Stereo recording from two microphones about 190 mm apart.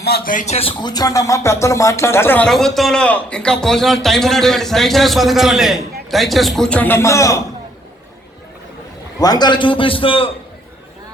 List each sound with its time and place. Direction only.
0.0 s speech: 50° left (ahead or behind); by 7.4 s 15° left (ahead or behind)
9.1 s a man's voice: 20° left (ahead or behind)